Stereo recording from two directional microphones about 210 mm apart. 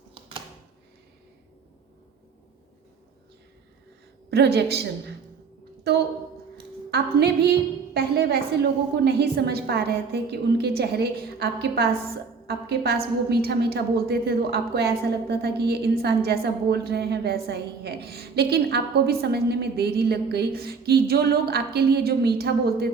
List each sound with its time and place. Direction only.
4.3 s a woman's voice: 50° right (ahead or behind)
6.9 s a sound: 50° right (ahead or behind)
7.9 s a woman's voice: 50° right (ahead or behind)